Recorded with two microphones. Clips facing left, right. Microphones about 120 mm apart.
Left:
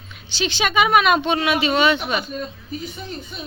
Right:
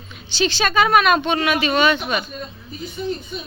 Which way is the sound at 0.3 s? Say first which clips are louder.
Right 1 dB; 15° left (ahead or behind).